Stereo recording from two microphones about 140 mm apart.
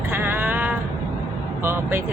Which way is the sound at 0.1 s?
15° right (ahead or behind).